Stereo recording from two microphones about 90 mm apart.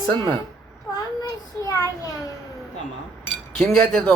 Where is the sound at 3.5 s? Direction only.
10° left (ahead or behind).